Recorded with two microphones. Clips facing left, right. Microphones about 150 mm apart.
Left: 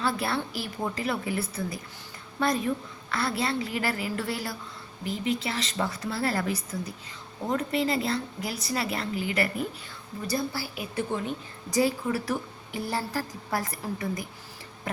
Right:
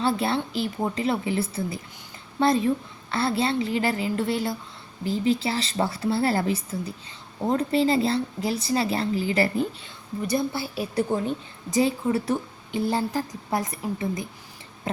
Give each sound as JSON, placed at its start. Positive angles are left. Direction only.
{"t": 0.0, "sound": "a woman's voice", "side_deg": -25}
{"t": 10.9, "sound": "speech", "side_deg": -35}
{"t": 11.7, "sound": "a woman's voice", "side_deg": -20}